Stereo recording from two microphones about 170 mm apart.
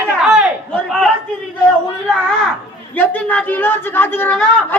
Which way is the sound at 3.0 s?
10° left (ahead or behind).